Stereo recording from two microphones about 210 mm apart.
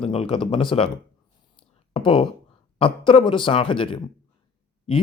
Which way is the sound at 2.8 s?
25° left (ahead or behind).